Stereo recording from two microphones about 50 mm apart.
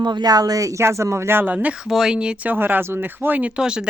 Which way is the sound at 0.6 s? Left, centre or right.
Right.